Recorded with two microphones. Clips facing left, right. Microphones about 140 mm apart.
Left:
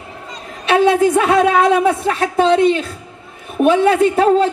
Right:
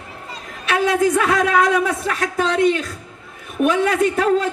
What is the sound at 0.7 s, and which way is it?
A woman's voice, 25° left (ahead or behind).